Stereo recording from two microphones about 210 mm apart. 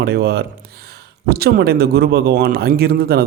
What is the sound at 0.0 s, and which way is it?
Speech, 50° right (ahead or behind).